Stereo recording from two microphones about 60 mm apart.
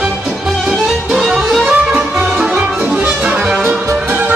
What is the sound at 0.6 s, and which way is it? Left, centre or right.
Music, centre.